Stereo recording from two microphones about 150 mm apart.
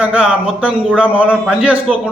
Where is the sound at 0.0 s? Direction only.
10° right (ahead or behind).